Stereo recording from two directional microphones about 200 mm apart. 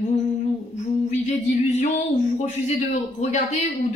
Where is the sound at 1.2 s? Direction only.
35° left (ahead or behind).